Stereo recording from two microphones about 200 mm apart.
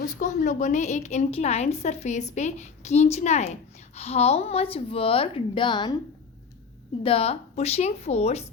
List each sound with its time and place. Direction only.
0.0 s a woman's voice: 40° left (ahead or behind); by 5.9 s 25° left (ahead or behind)
7.0 s a woman's voice: 30° left (ahead or behind)